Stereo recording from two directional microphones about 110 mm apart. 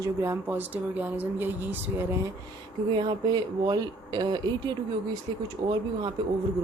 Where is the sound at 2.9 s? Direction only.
40° right (ahead or behind).